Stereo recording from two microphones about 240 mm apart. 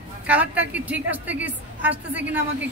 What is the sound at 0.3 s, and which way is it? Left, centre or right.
A woman's voice, centre.